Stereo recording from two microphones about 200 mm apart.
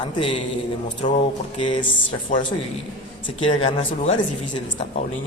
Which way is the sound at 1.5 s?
35° left (ahead or behind).